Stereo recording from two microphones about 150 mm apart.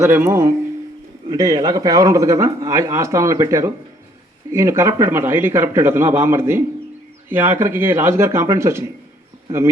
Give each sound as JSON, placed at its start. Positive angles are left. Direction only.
{"t": 0.0, "sound": "a man's voice", "side_deg": -15}